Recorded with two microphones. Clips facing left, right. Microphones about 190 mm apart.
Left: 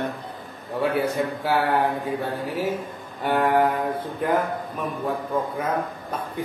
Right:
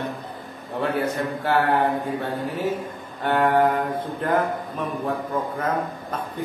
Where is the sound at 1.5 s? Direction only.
5° left (ahead or behind).